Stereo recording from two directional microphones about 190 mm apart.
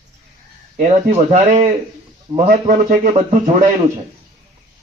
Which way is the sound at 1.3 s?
35° right (ahead or behind).